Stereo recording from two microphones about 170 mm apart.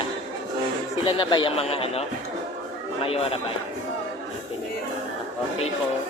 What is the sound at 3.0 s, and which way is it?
Speech, 35° left (ahead or behind).